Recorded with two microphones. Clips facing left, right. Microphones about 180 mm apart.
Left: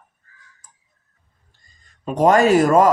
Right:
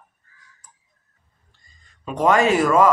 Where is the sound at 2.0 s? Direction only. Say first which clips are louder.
Left 3 dB; 40° left (ahead or behind).